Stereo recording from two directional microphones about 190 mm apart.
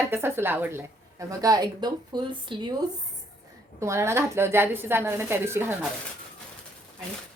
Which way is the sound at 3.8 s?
15° right (ahead or behind).